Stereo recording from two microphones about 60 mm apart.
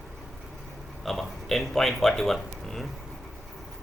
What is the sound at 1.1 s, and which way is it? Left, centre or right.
A man's voice, centre.